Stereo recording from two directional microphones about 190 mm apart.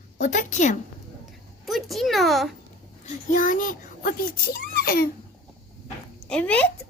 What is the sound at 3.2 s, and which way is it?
A child's voice, 45° left (ahead or behind).